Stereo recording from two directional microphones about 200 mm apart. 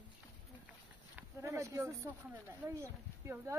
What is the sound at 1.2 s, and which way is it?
A woman's voice, 15° right (ahead or behind).